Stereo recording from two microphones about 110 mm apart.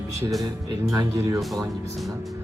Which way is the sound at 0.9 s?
25° right (ahead or behind).